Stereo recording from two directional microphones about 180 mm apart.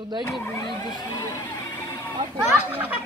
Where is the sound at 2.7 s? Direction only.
10° right (ahead or behind).